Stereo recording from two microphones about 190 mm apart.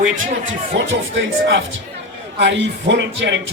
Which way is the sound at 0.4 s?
90° right.